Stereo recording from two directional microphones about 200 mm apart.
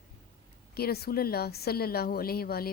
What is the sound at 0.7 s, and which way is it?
A woman's voice, 50° left (ahead or behind).